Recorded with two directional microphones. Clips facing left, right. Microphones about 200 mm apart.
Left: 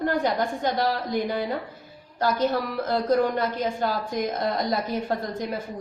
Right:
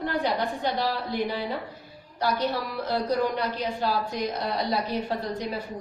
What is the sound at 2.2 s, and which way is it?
A woman's voice, 45° left (ahead or behind).